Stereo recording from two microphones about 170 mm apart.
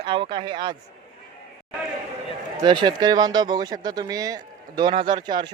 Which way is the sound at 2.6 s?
25° right (ahead or behind).